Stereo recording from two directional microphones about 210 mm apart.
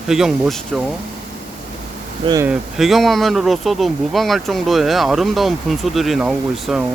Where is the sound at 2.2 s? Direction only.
20° right (ahead or behind).